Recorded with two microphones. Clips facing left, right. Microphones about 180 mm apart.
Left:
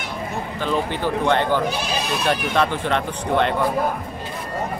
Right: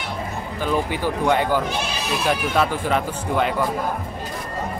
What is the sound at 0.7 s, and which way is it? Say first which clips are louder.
Speech: even; 10° right (ahead or behind).